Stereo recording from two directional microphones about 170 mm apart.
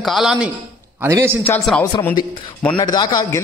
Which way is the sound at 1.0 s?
15° right (ahead or behind).